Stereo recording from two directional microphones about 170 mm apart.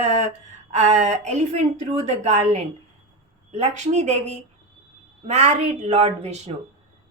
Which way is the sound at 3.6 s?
40° right (ahead or behind).